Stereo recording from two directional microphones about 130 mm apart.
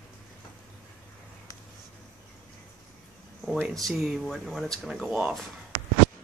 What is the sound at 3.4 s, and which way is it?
Speech, centre (ahead or behind).